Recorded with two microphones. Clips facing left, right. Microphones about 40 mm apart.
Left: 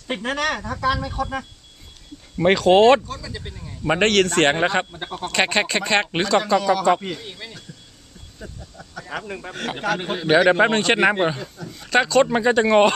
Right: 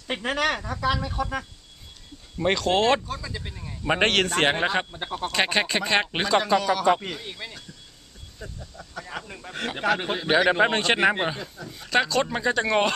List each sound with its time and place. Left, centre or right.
0.1 s speech: centre
0.6 s a man's voice: centre
2.6 s speech: centre
3.1 s speech: centre
3.3 s a man's voice: centre
9.0 s speech: centre
10.0 s a man's voice: centre
12.2 s speech: centre